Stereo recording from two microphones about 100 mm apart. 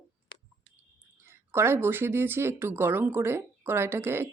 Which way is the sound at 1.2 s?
25° right (ahead or behind).